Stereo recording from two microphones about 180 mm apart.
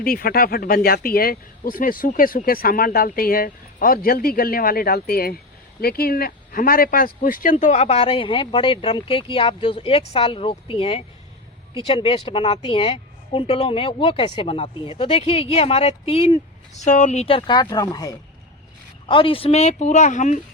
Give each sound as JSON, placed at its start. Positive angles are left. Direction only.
{"t": 0.0, "sound": "a woman's voice", "side_deg": 55}